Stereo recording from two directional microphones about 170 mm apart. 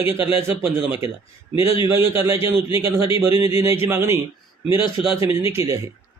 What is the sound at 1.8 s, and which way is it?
A man's voice, 15° right (ahead or behind).